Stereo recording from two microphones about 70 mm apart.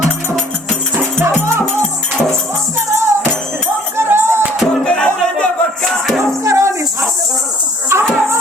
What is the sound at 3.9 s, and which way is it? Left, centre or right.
Music, right.